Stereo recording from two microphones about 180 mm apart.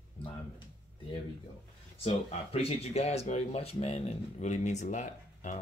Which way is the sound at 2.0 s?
35° left (ahead or behind).